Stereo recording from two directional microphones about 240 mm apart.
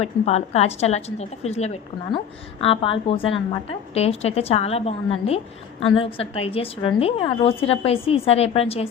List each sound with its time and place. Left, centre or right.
0.0 s a woman's voice: left